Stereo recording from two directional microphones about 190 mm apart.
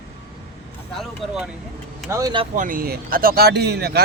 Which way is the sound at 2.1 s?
20° right (ahead or behind).